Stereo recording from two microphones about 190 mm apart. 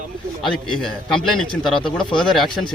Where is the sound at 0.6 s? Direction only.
5° left (ahead or behind).